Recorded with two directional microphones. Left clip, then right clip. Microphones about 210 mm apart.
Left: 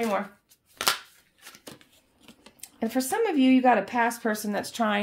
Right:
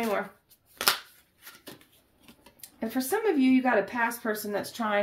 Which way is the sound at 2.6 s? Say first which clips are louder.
Left 4 dB; 40° left (ahead or behind).